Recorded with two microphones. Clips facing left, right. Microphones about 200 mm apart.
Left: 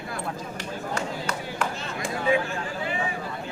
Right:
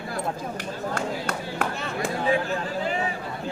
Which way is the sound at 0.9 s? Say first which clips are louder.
Even; 55° right (ahead or behind).